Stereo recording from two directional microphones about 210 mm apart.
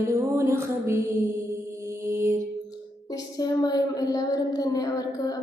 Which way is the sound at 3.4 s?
20° left (ahead or behind).